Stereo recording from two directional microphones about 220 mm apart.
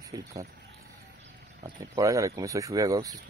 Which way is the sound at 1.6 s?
15° right (ahead or behind).